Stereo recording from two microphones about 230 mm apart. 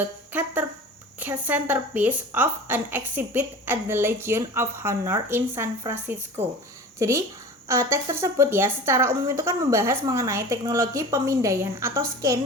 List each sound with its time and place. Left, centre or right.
0.0 s a woman's voice: centre
7.7 s a woman's voice: centre